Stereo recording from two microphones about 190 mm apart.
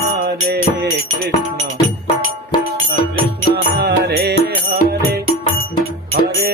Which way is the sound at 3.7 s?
60° right (ahead or behind).